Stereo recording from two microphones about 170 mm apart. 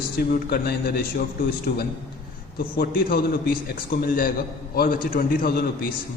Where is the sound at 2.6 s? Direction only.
60° left (ahead or behind).